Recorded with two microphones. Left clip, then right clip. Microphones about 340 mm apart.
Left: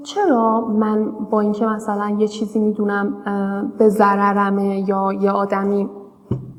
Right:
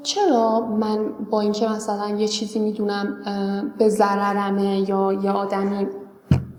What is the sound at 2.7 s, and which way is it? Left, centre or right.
Mantra, left.